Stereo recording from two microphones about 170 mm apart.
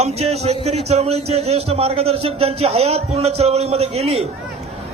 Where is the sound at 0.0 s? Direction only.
40° right (ahead or behind).